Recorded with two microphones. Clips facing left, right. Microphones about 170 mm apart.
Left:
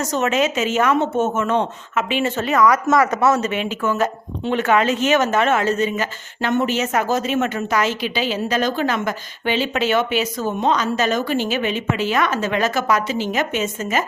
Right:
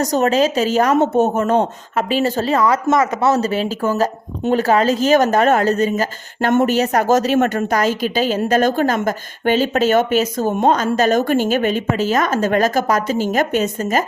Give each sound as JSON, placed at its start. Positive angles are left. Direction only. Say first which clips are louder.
{"t": 0.0, "sound": "speech", "louder": "right 4 dB", "side_deg": -35}